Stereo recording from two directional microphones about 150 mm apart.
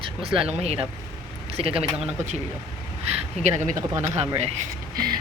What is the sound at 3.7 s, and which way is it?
Speech, 20° right (ahead or behind).